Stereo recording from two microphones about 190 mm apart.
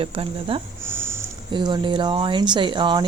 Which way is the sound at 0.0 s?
30° right (ahead or behind).